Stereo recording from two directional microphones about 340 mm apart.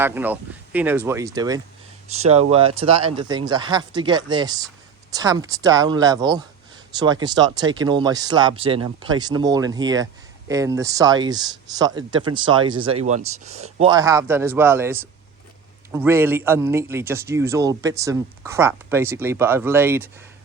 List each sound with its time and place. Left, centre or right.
0.0 s a man's voice: centre